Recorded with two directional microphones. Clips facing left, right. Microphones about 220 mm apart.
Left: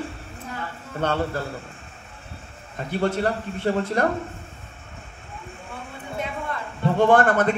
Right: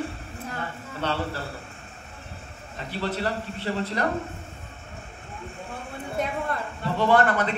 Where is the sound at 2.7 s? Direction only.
50° left (ahead or behind).